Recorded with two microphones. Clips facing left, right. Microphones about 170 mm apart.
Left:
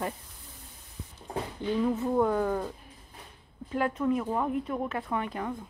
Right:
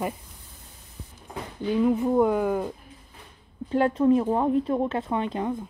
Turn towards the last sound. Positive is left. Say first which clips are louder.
# right 5 dB
turn(degrees=-20)  # may be behind; listen again after turning